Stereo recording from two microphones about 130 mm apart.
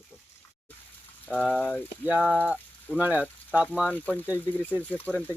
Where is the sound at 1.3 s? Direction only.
10° left (ahead or behind).